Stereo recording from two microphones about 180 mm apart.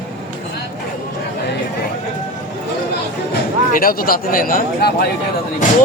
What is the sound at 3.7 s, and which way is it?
Speech, 55° left (ahead or behind).